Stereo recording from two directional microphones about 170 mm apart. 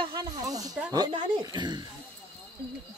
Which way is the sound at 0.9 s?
25° right (ahead or behind).